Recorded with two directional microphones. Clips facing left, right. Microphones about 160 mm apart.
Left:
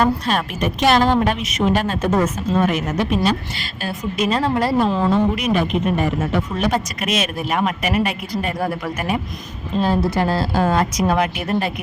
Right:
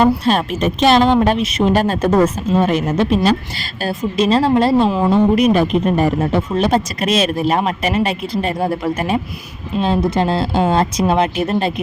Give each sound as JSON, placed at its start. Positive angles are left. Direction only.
{"t": 0.3, "sound": "a woman's voice", "side_deg": -25}
{"t": 4.9, "sound": "a woman's voice", "side_deg": -15}
{"t": 5.1, "sound": "speech", "side_deg": -35}